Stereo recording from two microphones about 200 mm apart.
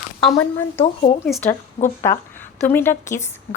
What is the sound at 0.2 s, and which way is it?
A woman's voice, centre (ahead or behind).